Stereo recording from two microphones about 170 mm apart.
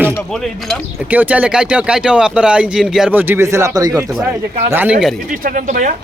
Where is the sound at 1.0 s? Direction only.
10° right (ahead or behind).